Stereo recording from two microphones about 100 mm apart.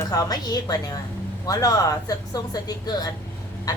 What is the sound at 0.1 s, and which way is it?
Speech, 40° left (ahead or behind).